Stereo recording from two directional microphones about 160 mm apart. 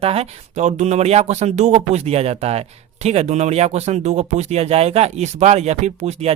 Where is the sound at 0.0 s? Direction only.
40° right (ahead or behind).